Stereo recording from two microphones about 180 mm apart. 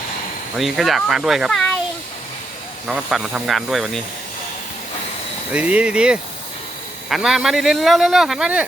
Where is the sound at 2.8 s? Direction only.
Centre (ahead or behind).